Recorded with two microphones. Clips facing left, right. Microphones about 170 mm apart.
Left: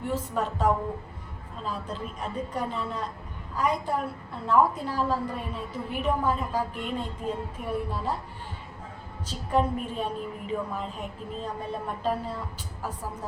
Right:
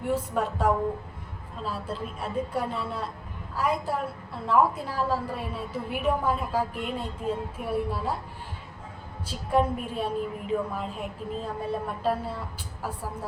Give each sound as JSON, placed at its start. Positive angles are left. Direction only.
{"t": 0.0, "sound": "a woman's voice", "side_deg": -10}
{"t": 9.2, "sound": "a woman's voice", "side_deg": -10}